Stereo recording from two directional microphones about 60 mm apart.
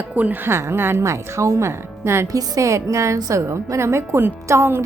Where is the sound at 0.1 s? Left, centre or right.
Right.